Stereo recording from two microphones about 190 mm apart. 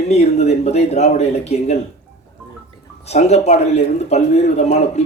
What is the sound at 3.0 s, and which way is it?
Speech, 35° left (ahead or behind).